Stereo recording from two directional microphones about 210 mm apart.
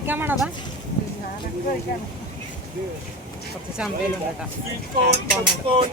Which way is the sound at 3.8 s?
5° right (ahead or behind).